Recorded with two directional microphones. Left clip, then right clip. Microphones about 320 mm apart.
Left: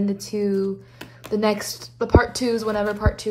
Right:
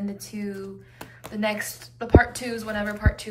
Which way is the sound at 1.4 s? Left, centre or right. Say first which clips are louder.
Left 2 dB; centre.